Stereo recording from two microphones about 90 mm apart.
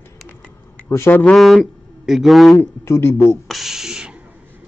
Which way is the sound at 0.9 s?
30° left (ahead or behind).